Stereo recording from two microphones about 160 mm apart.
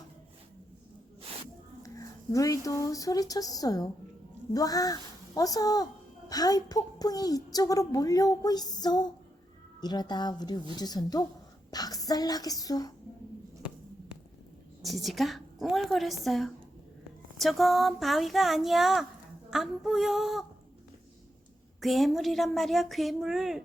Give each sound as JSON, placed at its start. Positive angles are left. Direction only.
{"t": 1.8, "sound": "a child's voice", "side_deg": 20}
{"t": 13.6, "sound": "hum", "side_deg": -5}
{"t": 14.8, "sound": "speech", "side_deg": 0}
{"t": 21.8, "sound": "speech", "side_deg": 0}